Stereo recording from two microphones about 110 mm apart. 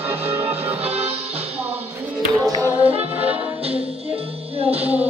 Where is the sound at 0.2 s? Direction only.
65° right (ahead or behind).